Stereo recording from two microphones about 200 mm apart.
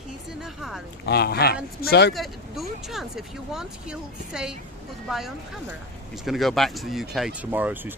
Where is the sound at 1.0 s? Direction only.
55° left (ahead or behind).